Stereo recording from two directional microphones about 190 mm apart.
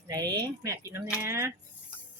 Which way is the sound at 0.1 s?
20° right (ahead or behind).